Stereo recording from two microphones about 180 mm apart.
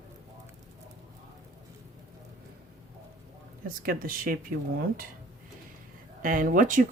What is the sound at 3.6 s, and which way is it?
Speech, 55° right (ahead or behind).